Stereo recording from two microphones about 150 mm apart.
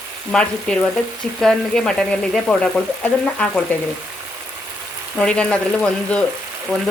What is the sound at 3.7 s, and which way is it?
Frying, 10° left (ahead or behind).